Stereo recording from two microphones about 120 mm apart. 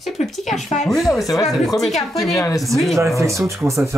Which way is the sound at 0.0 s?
Centre (ahead or behind).